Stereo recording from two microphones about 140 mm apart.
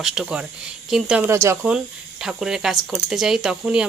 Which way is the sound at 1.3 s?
20° right (ahead or behind).